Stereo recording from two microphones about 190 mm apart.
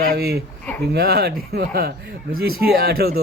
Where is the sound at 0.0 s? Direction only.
55° right (ahead or behind).